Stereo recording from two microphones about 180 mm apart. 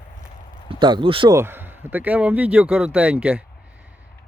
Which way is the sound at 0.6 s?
25° right (ahead or behind).